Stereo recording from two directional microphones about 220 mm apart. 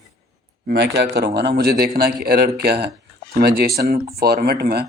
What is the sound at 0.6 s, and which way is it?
A man's voice, 50° right (ahead or behind).